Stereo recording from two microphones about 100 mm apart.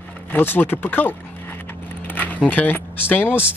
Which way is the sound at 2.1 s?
15° left (ahead or behind).